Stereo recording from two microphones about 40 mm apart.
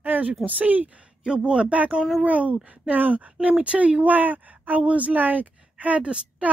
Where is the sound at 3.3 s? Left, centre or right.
Right.